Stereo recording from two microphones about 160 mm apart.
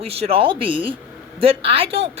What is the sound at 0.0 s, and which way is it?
A woman's voice, 40° right (ahead or behind).